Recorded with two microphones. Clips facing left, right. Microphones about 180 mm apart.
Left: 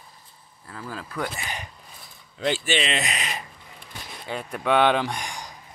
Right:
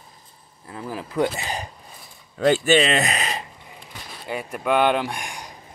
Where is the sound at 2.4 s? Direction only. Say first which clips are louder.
Right 8 dB; 45° right (ahead or behind).